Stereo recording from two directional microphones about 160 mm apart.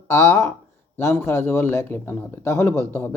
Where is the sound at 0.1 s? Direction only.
15° left (ahead or behind).